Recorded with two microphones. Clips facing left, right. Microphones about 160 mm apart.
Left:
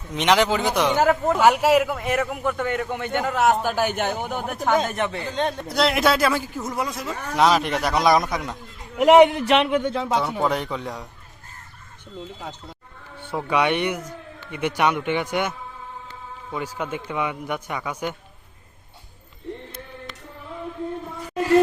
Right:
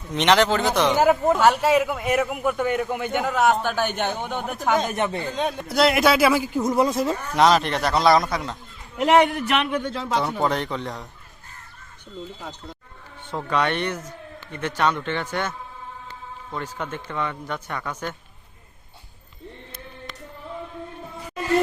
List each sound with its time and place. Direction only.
0.1 s a man's voice: 5° left (ahead or behind)
0.9 s a man's voice: 10° right (ahead or behind)
1.4 s a man's voice: 10° left (ahead or behind); by 3.3 s 10° right (ahead or behind)
3.3 s speech: 5° left (ahead or behind)
4.9 s speech: 25° right (ahead or behind)
5.4 s a man's voice: 5° right (ahead or behind); by 7.2 s 25° right (ahead or behind)
7.3 s a man's voice: 5° left (ahead or behind)
9.3 s speech: 30° left (ahead or behind)
10.2 s a man's voice: 5° left (ahead or behind)
13.3 s a man's voice: 10° left (ahead or behind)